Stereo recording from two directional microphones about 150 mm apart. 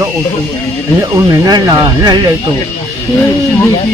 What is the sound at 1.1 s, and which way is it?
Speech, 25° right (ahead or behind).